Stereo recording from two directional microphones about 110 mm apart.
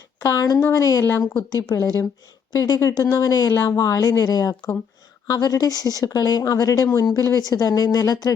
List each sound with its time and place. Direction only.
0.2 s speech: 35° left (ahead or behind)